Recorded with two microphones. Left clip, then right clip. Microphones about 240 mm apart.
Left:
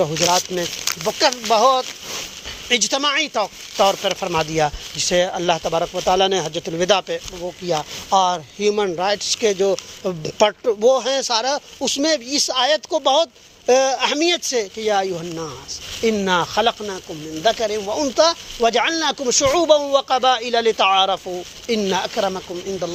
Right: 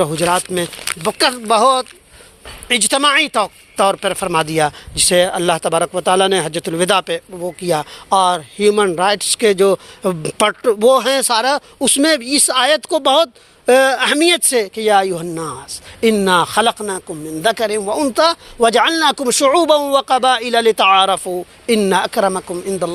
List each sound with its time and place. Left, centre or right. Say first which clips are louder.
0.1 s speech: right 2 dB; right